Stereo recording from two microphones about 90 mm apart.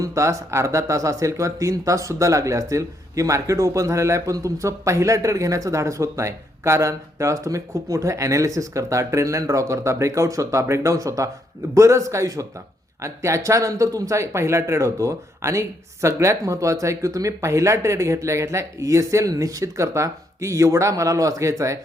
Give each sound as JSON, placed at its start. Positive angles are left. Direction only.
{"t": 0.0, "sound": "speech", "side_deg": -35}